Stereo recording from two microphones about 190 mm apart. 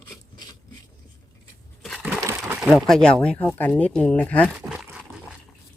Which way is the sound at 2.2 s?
15° right (ahead or behind).